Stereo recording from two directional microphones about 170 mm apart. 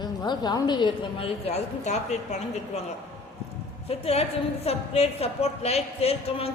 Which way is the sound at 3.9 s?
35° left (ahead or behind).